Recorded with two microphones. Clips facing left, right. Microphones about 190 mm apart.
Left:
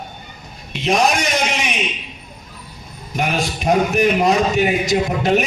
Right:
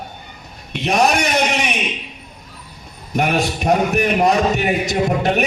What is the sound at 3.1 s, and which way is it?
A man's voice, 60° right (ahead or behind).